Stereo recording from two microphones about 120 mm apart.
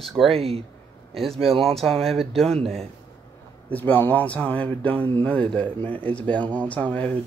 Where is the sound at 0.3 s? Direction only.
55° right (ahead or behind).